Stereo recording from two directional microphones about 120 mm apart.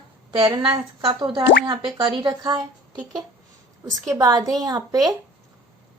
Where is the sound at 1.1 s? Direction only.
35° right (ahead or behind).